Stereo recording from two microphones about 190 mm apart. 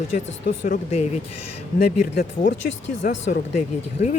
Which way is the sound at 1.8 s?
55° left (ahead or behind).